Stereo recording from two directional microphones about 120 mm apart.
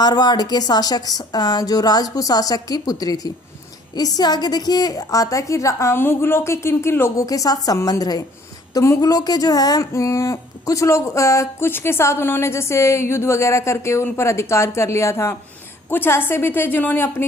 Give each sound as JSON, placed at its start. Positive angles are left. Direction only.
{"t": 0.0, "sound": "a woman's voice", "side_deg": 35}